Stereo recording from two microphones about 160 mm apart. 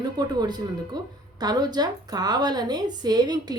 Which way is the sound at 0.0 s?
25° right (ahead or behind).